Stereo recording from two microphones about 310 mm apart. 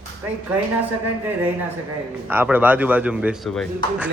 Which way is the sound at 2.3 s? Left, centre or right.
Centre.